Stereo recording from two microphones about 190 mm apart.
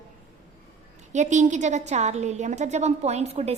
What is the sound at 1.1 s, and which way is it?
A woman's voice, 40° right (ahead or behind).